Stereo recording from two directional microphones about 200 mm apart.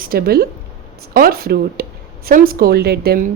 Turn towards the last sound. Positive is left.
turn(degrees=-50)  # may be behind; listen again after turning